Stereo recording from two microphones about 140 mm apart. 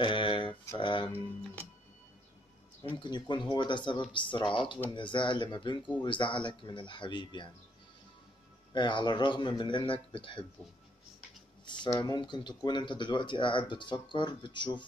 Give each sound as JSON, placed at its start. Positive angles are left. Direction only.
{"t": 0.0, "sound": "a sound", "side_deg": 35}
{"t": 0.7, "sound": "speech", "side_deg": 35}
{"t": 3.0, "sound": "speech", "side_deg": 35}
{"t": 8.7, "sound": "speech", "side_deg": 35}
{"t": 11.6, "sound": "a sound", "side_deg": 35}
{"t": 11.9, "sound": "speech", "side_deg": 30}